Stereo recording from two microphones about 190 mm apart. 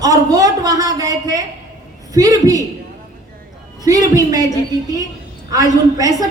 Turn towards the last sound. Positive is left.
turn(degrees=-20)  # may be behind; listen again after turning